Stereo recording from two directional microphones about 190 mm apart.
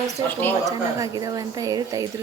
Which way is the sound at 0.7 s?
20° right (ahead or behind).